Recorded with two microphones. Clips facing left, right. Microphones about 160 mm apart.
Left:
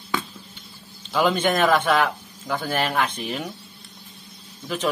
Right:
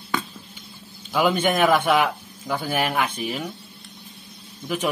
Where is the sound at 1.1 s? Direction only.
10° right (ahead or behind).